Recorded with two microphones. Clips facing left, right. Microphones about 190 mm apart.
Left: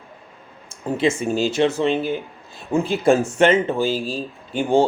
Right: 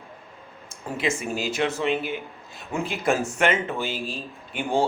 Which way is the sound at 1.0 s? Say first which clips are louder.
Left 7 dB; 30° left (ahead or behind).